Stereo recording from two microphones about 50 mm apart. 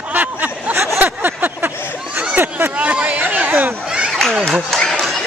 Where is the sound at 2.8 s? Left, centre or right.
Right.